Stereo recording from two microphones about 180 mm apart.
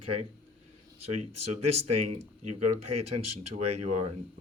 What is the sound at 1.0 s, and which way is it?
Speech, 35° right (ahead or behind).